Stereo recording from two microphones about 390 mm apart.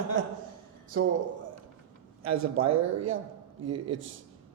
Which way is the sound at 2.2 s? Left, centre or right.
Right.